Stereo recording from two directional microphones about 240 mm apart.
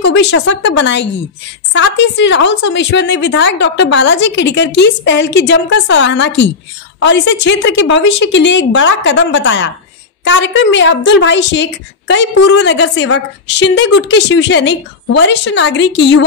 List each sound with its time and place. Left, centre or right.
0.0 s a woman's voice: left